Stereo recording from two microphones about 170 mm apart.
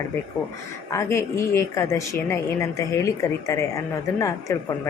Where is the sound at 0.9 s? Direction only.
15° left (ahead or behind).